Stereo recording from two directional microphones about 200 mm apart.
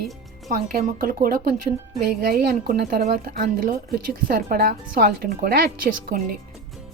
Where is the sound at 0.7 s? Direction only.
45° right (ahead or behind).